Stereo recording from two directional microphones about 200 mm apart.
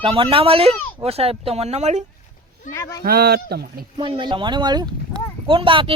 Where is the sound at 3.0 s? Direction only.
50° right (ahead or behind).